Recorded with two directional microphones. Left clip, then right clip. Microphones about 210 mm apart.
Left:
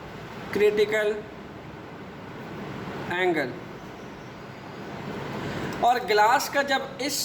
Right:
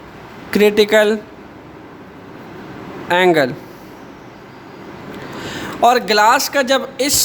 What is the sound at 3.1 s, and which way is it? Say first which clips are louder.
Speech: right 13 dB; 55° right (ahead or behind).